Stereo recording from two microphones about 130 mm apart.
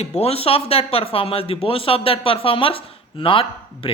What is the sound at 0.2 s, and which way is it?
A man's voice, 50° left (ahead or behind).